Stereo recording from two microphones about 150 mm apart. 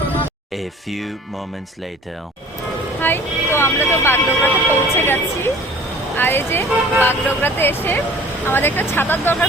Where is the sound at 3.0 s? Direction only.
15° left (ahead or behind).